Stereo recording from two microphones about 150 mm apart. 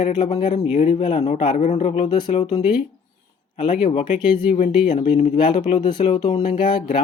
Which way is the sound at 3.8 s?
35° left (ahead or behind).